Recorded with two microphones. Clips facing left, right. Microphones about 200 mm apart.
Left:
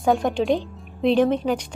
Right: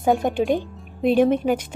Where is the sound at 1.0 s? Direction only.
55° right (ahead or behind).